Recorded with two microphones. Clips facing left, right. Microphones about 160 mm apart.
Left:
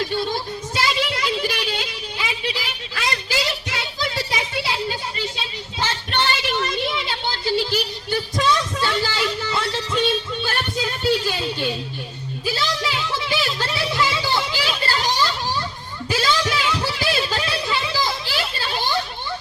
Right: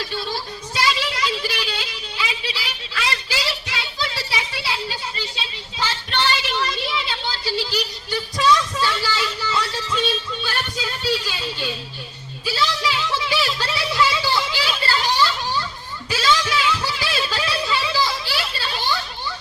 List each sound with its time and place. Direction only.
0.0 s child singing: 50° left (ahead or behind)
10.4 s music: 45° left (ahead or behind)
12.8 s a sound: 45° left (ahead or behind)
14.9 s children playing: 40° left (ahead or behind)
16.0 s a sound: 45° left (ahead or behind)
18.7 s children playing: 50° left (ahead or behind)